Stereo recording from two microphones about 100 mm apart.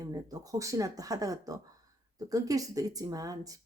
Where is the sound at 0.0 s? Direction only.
40° right (ahead or behind).